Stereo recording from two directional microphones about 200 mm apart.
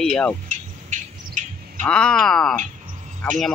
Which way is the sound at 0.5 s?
40° right (ahead or behind).